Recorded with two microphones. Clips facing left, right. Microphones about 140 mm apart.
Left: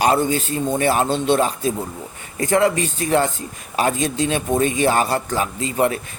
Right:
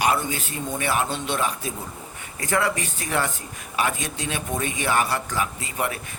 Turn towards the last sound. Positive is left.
turn(degrees=30)  # may be behind; listen again after turning